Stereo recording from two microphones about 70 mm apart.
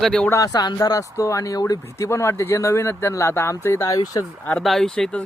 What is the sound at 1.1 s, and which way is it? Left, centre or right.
Speech, left.